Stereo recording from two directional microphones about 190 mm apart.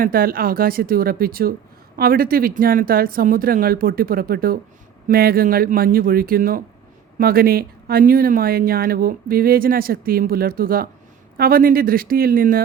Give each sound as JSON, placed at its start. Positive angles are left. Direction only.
{"t": 0.0, "sound": "speech", "side_deg": -50}